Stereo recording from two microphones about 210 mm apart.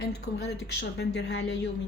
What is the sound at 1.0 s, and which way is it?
Speech, 55° left (ahead or behind).